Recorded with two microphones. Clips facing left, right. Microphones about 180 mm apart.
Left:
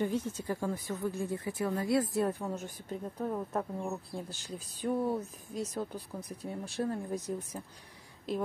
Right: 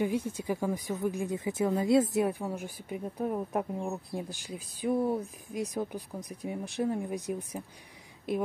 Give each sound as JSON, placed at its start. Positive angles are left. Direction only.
{"t": 0.0, "sound": "speech", "side_deg": -10}
{"t": 2.2, "sound": "speech", "side_deg": -10}